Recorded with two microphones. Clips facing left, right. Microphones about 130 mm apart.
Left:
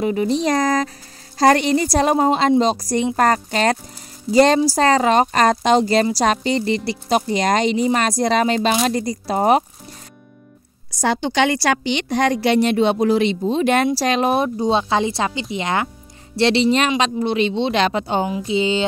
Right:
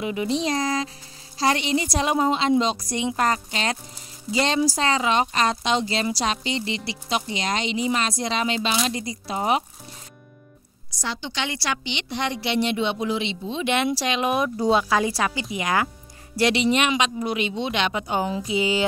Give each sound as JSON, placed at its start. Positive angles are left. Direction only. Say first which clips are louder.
{"t": 0.0, "sound": "speech", "louder": "left 6 dB", "side_deg": 40}
{"t": 11.0, "sound": "a woman's voice", "louder": "left 12 dB", "side_deg": 50}